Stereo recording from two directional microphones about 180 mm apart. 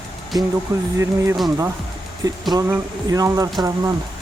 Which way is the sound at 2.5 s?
20° right (ahead or behind).